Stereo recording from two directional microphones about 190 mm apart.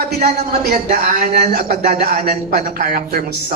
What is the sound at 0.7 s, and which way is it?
A man's voice, 50° right (ahead or behind).